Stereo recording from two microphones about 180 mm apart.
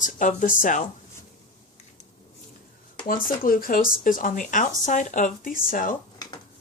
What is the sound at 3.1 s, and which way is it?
Speech, 50° left (ahead or behind).